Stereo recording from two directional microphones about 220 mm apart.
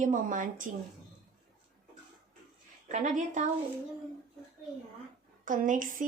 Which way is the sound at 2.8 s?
35° right (ahead or behind).